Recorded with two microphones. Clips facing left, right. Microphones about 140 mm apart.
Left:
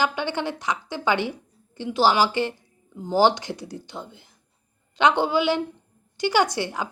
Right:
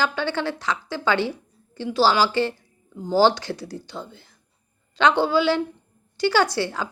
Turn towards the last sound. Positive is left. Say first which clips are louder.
# right 1 dB
turn(degrees=20)  # may be behind; listen again after turning